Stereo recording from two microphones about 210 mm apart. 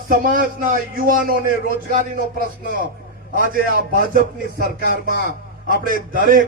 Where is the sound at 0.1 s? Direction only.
40° right (ahead or behind).